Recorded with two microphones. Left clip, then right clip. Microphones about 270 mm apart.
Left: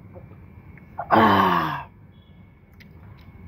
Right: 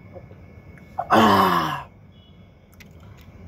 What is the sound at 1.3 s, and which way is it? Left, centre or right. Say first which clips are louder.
Groan: right 1 dB; left.